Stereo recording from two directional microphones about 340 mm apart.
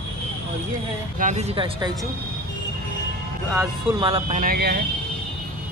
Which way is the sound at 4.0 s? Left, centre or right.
Centre.